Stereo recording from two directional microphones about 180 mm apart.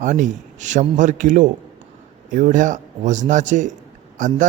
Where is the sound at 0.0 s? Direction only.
45° right (ahead or behind).